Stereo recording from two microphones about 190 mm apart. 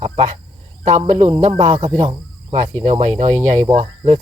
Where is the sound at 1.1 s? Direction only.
30° right (ahead or behind).